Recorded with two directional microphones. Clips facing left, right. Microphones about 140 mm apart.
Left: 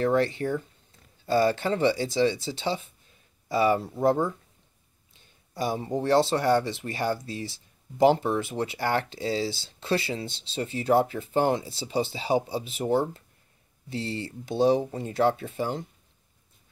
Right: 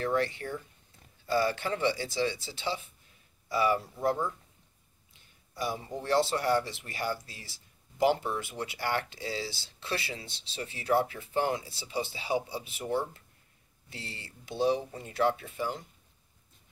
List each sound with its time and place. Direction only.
0.0 s speech: 30° left (ahead or behind)
5.6 s speech: 25° left (ahead or behind)